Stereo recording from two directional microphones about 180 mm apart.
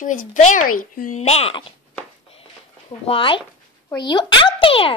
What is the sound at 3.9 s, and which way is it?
A child's voice, 25° left (ahead or behind).